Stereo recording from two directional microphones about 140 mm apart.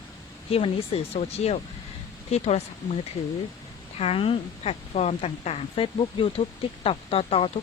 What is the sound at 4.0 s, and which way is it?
A woman's voice, 45° left (ahead or behind).